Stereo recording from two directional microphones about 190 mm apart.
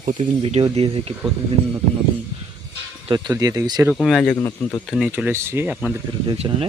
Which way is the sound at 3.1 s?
20° right (ahead or behind).